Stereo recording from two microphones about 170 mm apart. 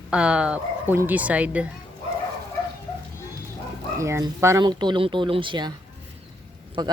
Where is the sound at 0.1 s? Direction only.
5° right (ahead or behind).